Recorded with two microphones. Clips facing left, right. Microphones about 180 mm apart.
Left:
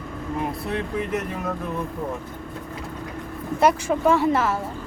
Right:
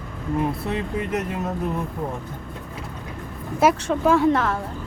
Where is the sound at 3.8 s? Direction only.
Centre (ahead or behind).